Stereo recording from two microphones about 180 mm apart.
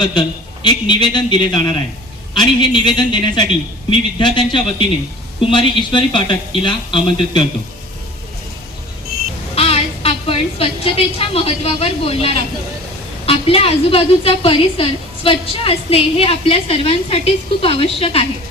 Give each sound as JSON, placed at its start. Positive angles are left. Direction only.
{"t": 0.0, "sound": "speech", "side_deg": 25}
{"t": 9.6, "sound": "a woman's voice", "side_deg": 35}